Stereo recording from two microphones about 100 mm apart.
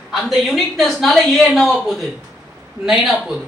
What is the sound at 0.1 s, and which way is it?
A man's voice, centre (ahead or behind).